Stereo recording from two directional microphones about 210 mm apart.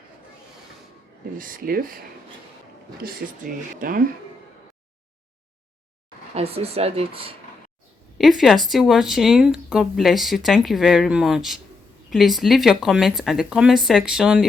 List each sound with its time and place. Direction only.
1.4 s speech: 40° right (ahead or behind)
3.0 s speech: 45° right (ahead or behind)
6.3 s speech: 30° right (ahead or behind)
8.2 s speech: centre (ahead or behind)